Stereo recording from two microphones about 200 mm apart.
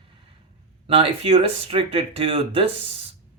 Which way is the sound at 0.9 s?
25° right (ahead or behind).